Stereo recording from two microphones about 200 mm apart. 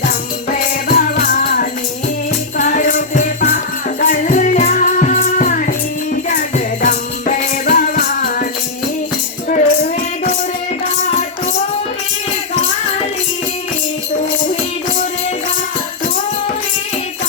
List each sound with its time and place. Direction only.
0.5 s music: 45° left (ahead or behind)
6.8 s music: 45° left (ahead or behind)
9.5 s music: 40° left (ahead or behind)